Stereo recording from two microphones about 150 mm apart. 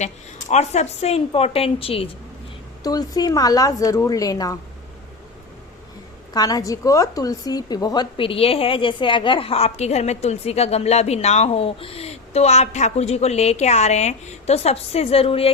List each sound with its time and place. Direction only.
0.5 s a woman's voice: 50° left (ahead or behind)
2.8 s a woman's voice: 25° left (ahead or behind)
6.3 s a woman's voice: 25° left (ahead or behind)
8.1 s a woman's voice: 35° left (ahead or behind)